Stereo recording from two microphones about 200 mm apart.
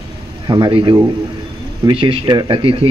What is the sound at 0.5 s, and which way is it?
Speech, 25° right (ahead or behind).